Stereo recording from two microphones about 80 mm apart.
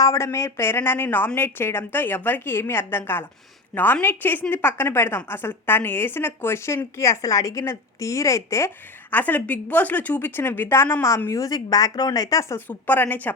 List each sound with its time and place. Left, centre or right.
0.0 s a woman's voice: left
9.1 s a woman's voice: left
11.3 s speech: left
12.5 s a woman's voice: left